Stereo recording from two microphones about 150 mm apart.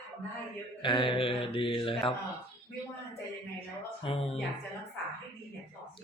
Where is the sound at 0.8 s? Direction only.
35° left (ahead or behind).